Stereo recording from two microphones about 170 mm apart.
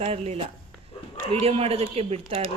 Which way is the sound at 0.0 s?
40° right (ahead or behind).